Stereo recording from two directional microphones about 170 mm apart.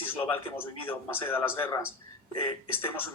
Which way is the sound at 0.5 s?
15° left (ahead or behind).